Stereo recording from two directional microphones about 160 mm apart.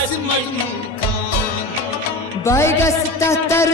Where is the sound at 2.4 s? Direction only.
15° left (ahead or behind).